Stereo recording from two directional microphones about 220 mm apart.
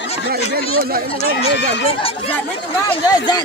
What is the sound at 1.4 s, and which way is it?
Speech, 25° left (ahead or behind).